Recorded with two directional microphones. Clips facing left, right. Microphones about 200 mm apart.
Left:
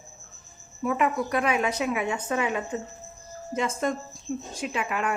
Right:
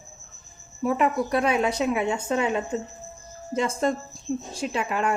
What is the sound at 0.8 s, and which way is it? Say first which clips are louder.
A woman's voice: right 2 dB; 35° right (ahead or behind).